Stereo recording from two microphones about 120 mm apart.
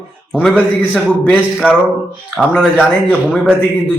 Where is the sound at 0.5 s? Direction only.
15° left (ahead or behind).